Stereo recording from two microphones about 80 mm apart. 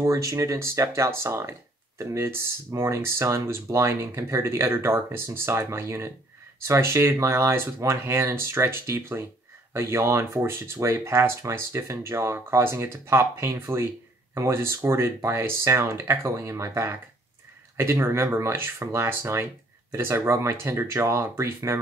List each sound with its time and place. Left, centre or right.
0.0 s speech: right
13.5 s speech: right